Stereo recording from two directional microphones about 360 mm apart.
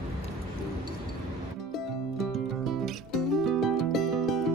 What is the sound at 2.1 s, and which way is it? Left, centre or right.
Music, centre.